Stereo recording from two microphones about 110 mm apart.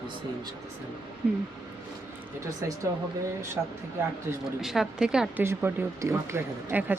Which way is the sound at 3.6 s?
15° right (ahead or behind).